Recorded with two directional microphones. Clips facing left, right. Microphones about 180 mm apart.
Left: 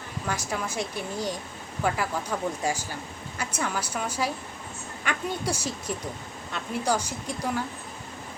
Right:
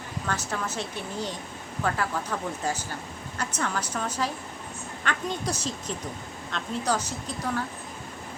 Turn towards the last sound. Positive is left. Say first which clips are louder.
# left 1 dB
turn(degrees=10)  # may be behind; listen again after turning